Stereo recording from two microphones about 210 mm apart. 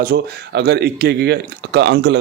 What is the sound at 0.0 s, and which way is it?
Speech, 45° right (ahead or behind).